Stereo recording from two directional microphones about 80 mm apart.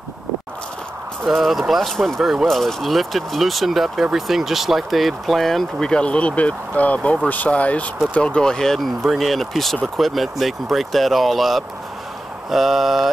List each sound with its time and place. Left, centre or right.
1.2 s speech: centre